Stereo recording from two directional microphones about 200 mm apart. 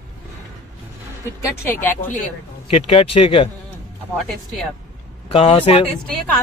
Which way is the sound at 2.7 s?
30° left (ahead or behind).